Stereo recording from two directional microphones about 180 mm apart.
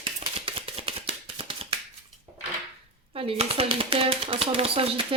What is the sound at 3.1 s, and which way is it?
Speech, 30° right (ahead or behind).